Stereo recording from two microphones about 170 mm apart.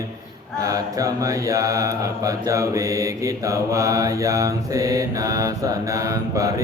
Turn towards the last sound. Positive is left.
turn(degrees=-20)  # may be behind; listen again after turning